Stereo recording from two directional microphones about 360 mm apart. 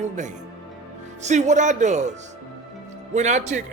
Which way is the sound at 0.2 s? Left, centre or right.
Centre.